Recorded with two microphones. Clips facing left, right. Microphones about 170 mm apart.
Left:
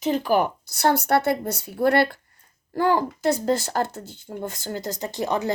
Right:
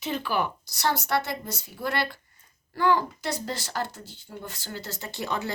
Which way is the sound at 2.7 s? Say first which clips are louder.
Left 3 dB; 40° left (ahead or behind).